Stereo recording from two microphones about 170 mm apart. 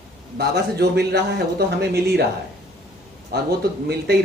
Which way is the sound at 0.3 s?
70° right (ahead or behind).